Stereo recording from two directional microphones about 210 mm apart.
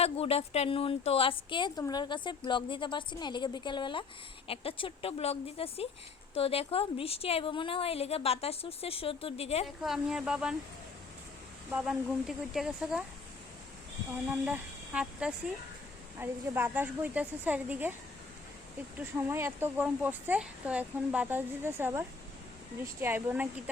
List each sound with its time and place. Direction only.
0.0 s speech: 30° left (ahead or behind)
9.8 s speech: centre (ahead or behind)
12.5 s speech: 5° right (ahead or behind)
14.4 s speech: 5° right (ahead or behind)
18.9 s speech: 10° right (ahead or behind)